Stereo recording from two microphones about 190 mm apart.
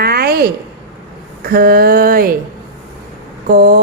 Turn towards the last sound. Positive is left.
turn(degrees=-55)  # may be behind; listen again after turning